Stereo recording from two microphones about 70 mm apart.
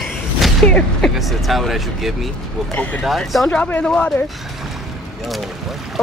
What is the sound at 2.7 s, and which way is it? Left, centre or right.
Speech, left.